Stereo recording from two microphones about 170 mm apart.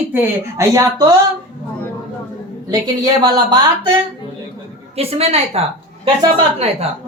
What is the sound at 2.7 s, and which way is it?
Speech, 25° right (ahead or behind).